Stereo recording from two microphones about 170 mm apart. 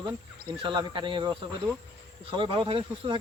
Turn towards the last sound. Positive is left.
turn(degrees=-30)  # may be behind; listen again after turning